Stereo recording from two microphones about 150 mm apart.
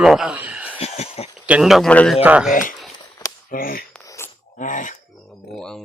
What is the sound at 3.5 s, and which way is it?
Speech, 70° left (ahead or behind).